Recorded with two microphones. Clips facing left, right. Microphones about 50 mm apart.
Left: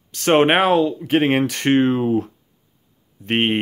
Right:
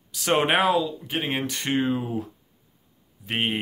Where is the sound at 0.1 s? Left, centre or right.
Left.